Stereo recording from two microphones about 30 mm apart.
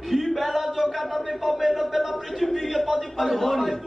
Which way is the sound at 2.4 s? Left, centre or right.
Centre.